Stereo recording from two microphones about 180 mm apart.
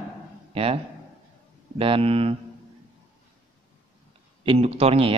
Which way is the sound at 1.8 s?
30° right (ahead or behind).